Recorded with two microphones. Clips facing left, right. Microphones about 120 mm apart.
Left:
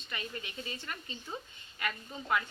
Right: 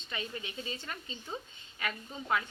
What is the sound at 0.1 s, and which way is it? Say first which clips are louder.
A woman's voice: right 2 dB; 20° right (ahead or behind).